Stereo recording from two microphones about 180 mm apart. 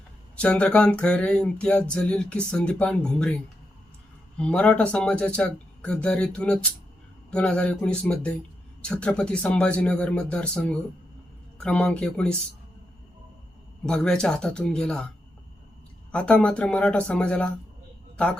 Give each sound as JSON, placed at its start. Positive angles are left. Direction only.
{"t": 0.4, "sound": "speech", "side_deg": 5}
{"t": 13.8, "sound": "speech", "side_deg": 5}
{"t": 16.1, "sound": "speech", "side_deg": 5}